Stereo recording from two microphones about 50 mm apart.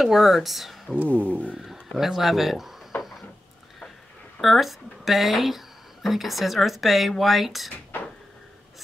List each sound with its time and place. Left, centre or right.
0.0 s speech: centre
0.9 s speech: right
2.0 s speech: centre
2.9 s a sound: left
4.4 s speech: centre